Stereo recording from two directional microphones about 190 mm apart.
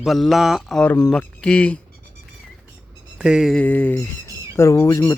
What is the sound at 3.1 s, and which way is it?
Speech, 5° right (ahead or behind).